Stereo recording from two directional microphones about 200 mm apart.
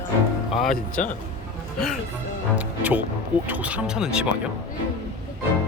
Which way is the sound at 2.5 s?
10° right (ahead or behind).